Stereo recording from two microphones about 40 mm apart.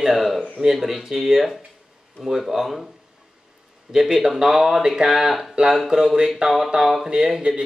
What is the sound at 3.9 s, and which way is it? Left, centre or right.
Speech, centre.